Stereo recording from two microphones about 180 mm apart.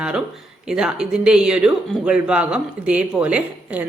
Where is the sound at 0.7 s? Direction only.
5° right (ahead or behind).